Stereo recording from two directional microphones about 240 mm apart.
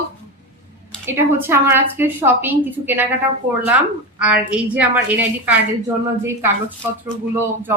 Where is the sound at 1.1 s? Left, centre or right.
Centre.